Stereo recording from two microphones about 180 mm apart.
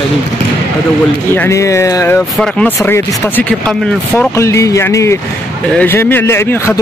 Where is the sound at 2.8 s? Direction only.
15° left (ahead or behind).